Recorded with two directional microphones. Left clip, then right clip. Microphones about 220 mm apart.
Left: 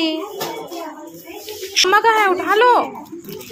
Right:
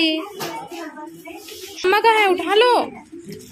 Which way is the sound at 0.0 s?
15° right (ahead or behind).